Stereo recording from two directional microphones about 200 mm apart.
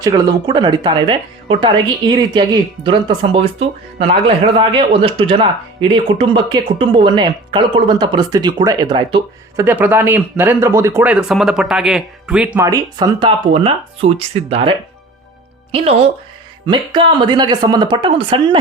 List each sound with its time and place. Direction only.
0.0 s speech: 20° right (ahead or behind)
9.6 s speech: 10° right (ahead or behind); by 18.6 s 25° right (ahead or behind)